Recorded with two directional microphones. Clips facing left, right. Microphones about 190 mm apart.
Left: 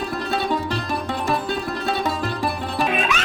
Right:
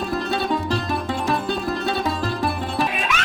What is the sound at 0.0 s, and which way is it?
Music, centre (ahead or behind).